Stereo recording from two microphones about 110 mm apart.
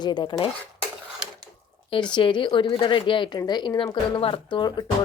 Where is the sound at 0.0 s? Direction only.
40° left (ahead or behind).